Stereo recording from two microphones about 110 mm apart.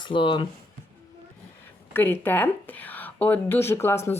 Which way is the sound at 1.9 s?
20° left (ahead or behind).